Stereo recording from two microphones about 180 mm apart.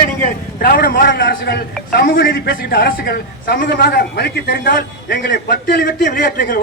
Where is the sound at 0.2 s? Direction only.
55° left (ahead or behind).